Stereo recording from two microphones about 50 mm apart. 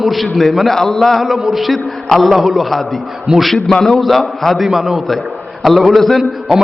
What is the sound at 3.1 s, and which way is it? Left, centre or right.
Speech, centre.